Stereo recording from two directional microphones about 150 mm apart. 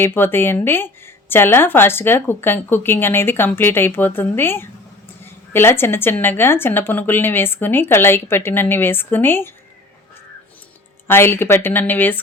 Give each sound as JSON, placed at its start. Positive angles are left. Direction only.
{"t": 0.0, "sound": "speech", "side_deg": 15}
{"t": 11.1, "sound": "speech", "side_deg": 15}